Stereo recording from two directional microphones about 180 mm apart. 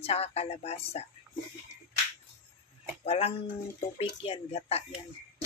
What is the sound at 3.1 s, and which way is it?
Speech, 35° left (ahead or behind).